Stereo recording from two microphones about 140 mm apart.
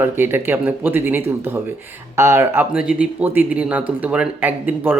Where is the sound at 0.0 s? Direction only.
15° right (ahead or behind).